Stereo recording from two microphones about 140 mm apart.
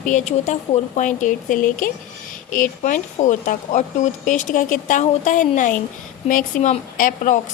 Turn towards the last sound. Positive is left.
turn(degrees=65)  # may be behind; listen again after turning